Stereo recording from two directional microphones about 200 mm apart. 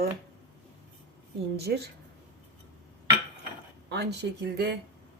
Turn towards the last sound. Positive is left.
turn(degrees=-55)  # may be behind; listen again after turning